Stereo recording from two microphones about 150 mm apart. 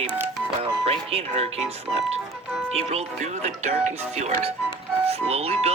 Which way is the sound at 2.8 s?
45° right (ahead or behind).